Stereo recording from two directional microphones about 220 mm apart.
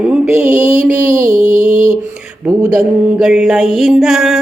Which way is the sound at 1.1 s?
15° right (ahead or behind).